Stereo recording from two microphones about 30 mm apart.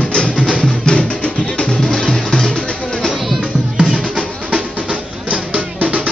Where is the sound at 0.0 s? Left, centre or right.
Left.